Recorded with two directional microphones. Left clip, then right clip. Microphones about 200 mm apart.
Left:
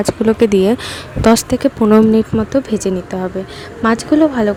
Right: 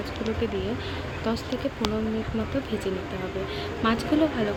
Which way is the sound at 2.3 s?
40° left (ahead or behind).